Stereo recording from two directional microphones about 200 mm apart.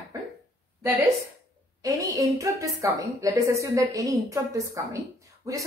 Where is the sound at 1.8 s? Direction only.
15° right (ahead or behind).